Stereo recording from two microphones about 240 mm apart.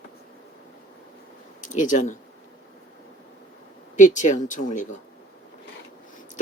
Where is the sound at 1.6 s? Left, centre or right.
Left.